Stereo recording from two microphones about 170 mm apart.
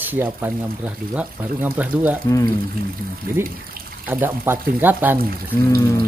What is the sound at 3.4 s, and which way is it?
Speech, 15° right (ahead or behind).